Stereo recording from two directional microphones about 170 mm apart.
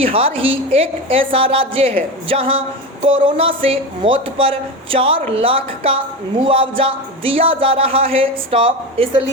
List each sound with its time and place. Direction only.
0.0 s speech: 35° right (ahead or behind)